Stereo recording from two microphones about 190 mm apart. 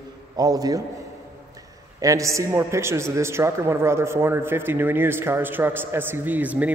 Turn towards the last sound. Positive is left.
turn(degrees=-10)  # may be behind; listen again after turning